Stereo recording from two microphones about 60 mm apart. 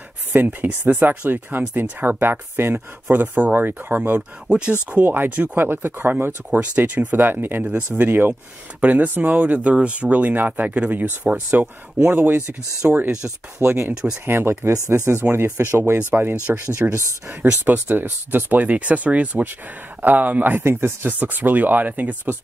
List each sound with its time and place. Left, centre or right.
0.3 s speech: right
4.5 s speech: centre
5.0 s speech: right
5.6 s speech: right
16.8 s speech: right